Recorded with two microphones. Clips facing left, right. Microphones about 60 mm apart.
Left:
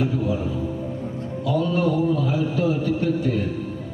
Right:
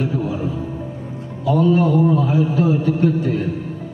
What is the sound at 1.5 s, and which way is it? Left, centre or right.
A man's voice, right.